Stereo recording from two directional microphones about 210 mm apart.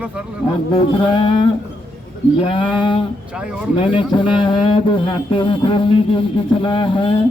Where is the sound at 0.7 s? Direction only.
25° left (ahead or behind).